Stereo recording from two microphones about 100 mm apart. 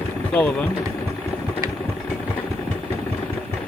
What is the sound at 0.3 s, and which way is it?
Speech, 15° left (ahead or behind).